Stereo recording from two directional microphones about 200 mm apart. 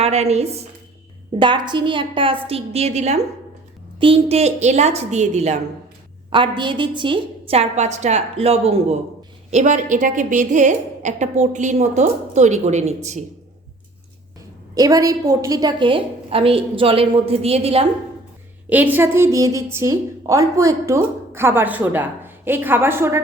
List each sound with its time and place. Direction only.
0.0 s a woman's voice: 30° right (ahead or behind)
6.6 s a woman's voice: 25° right (ahead or behind)
14.8 s a woman's voice: 15° right (ahead or behind)
18.7 s a woman's voice: 10° right (ahead or behind)